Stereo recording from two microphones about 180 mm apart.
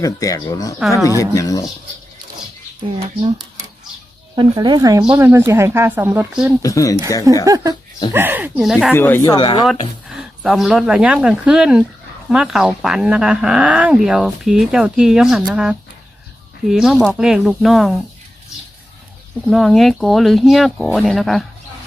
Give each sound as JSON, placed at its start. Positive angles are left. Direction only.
{"t": 0.0, "sound": "speech", "side_deg": 20}
{"t": 0.8, "sound": "speech", "side_deg": 0}
{"t": 1.2, "sound": "speech", "side_deg": 20}
{"t": 4.4, "sound": "speech", "side_deg": -25}
{"t": 6.6, "sound": "speech", "side_deg": 20}
{"t": 7.4, "sound": "speech", "side_deg": -20}
{"t": 8.9, "sound": "speech", "side_deg": 10}
{"t": 9.4, "sound": "speech", "side_deg": 25}
{"t": 10.2, "sound": "speech", "side_deg": 0}
{"t": 19.5, "sound": "speech", "side_deg": 0}